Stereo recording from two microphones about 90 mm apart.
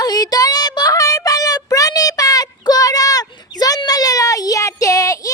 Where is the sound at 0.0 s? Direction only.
45° left (ahead or behind).